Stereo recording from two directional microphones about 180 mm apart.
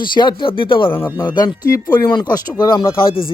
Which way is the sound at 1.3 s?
25° left (ahead or behind).